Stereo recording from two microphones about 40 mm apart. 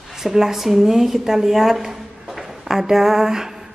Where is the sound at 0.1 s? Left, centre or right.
Centre.